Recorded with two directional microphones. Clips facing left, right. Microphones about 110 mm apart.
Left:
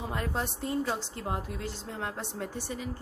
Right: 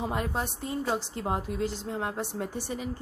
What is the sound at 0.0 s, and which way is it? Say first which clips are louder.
Speech: right 4 dB; 15° right (ahead or behind).